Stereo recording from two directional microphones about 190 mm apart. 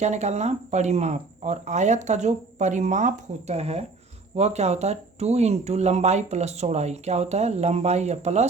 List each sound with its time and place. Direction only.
0.0 s speech: 35° right (ahead or behind)